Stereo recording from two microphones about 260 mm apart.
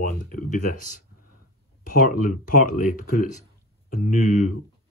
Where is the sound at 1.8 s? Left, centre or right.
Left.